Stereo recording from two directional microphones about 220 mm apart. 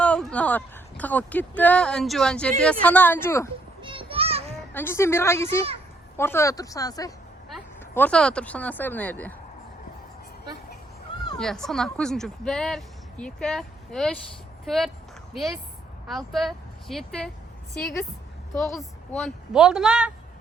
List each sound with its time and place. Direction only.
0.0 s a woman's voice: 5° left (ahead or behind)
3.8 s children playing: 20° right (ahead or behind)
4.7 s a woman's voice: 10° left (ahead or behind)
7.5 s speech: 5° left (ahead or behind)
11.3 s a woman's voice: centre (ahead or behind)
18.5 s a woman's voice: centre (ahead or behind)